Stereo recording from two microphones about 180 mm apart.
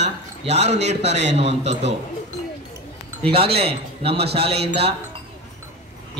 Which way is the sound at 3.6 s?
35° right (ahead or behind).